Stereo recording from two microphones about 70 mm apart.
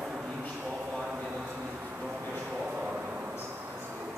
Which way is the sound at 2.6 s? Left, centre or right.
Centre.